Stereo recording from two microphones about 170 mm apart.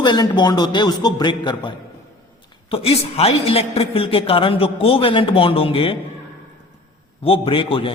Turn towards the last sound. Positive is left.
turn(degrees=30)  # may be behind; listen again after turning